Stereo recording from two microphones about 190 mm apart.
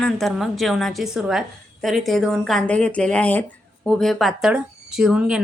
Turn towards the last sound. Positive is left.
turn(degrees=-5)  # may be behind; listen again after turning